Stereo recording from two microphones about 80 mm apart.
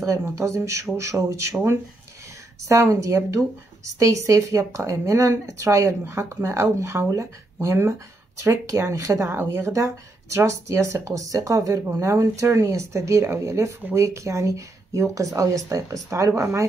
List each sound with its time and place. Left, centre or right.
0.2 s speech: right